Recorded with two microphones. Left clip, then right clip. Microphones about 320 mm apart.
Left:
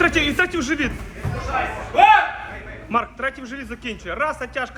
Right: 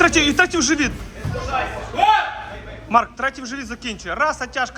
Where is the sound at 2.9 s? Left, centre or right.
Centre.